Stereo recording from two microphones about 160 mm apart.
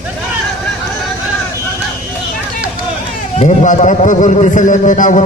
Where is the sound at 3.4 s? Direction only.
45° left (ahead or behind).